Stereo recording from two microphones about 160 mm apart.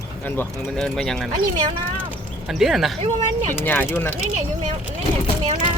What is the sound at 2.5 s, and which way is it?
Speech, centre (ahead or behind).